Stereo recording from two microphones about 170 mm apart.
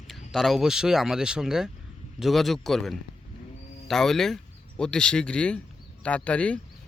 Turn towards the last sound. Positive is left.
turn(degrees=5)  # may be behind; listen again after turning